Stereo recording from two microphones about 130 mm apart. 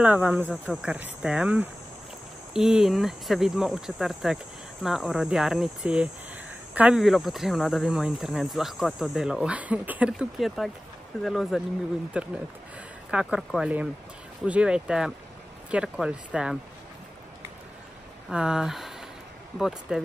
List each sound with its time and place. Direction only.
0.0 s speech: 10° right (ahead or behind)
18.3 s speech: 5° right (ahead or behind)